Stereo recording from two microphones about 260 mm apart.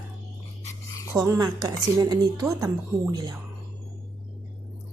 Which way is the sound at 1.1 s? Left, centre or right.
Centre.